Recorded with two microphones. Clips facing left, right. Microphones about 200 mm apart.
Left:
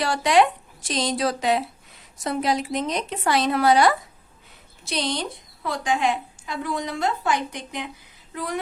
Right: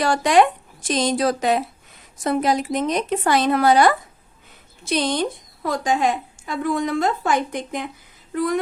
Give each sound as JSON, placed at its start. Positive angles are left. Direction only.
{"t": 0.0, "sound": "a woman's voice", "side_deg": -50}